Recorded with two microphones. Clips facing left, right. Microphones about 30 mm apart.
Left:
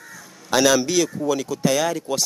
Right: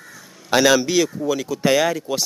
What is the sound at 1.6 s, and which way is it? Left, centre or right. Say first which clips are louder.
Speech: right 3 dB; centre.